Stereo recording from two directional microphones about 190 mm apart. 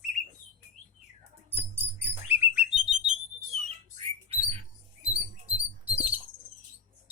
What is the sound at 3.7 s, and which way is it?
Rodents, 30° right (ahead or behind).